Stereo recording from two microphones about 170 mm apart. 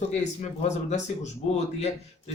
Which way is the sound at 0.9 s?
45° left (ahead or behind).